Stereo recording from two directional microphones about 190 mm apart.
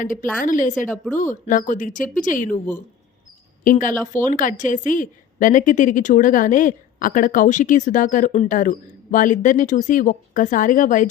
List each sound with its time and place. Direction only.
0.0 s a woman's voice: 45° left (ahead or behind)